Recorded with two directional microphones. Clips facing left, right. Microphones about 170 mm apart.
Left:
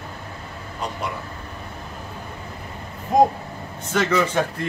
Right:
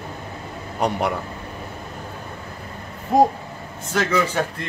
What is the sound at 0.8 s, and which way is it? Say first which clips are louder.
Speech: right 8 dB; 65° right (ahead or behind).